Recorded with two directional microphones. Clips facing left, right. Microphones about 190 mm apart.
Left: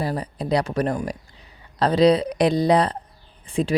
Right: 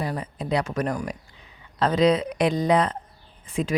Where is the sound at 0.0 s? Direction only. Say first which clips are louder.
Left 3 dB; 35° left (ahead or behind).